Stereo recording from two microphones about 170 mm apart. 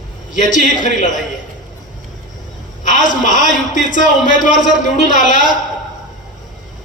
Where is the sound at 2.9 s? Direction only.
50° left (ahead or behind).